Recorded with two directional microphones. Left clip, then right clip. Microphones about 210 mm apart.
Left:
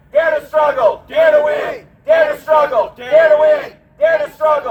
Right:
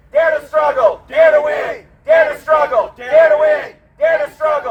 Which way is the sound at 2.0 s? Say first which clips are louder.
Right 1 dB; 10° right (ahead or behind).